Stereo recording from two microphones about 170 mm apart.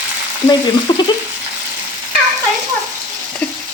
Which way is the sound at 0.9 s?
25° left (ahead or behind).